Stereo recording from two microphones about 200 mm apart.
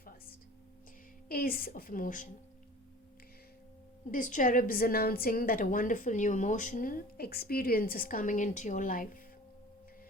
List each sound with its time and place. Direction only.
0.0 s a sound: 45° left (ahead or behind)
1.3 s a woman's voice: 45° left (ahead or behind)
4.1 s a woman's voice: 40° left (ahead or behind)